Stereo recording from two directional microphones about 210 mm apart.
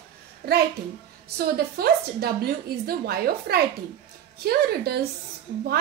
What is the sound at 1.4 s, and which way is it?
A woman's voice, 45° right (ahead or behind).